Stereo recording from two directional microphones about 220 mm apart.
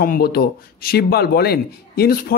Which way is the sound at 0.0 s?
45° left (ahead or behind).